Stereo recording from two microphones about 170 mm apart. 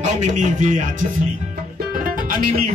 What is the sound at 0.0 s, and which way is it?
Speech, 45° right (ahead or behind).